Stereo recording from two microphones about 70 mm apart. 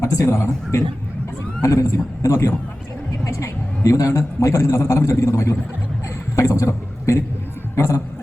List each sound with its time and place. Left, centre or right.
0.0 s a man's voice: left